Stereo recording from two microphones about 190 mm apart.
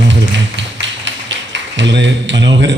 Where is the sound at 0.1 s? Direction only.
70° right (ahead or behind).